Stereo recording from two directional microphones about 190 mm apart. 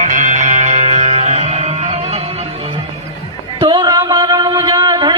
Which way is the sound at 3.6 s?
25° right (ahead or behind).